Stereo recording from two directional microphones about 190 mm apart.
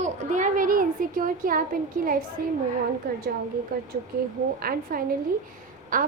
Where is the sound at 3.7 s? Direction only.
50° right (ahead or behind).